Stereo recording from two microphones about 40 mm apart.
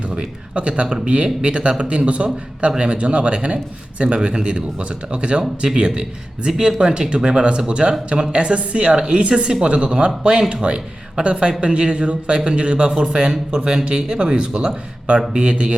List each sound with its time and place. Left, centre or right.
0.5 s a man's voice: right